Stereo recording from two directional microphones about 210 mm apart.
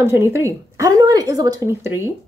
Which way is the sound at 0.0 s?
15° right (ahead or behind).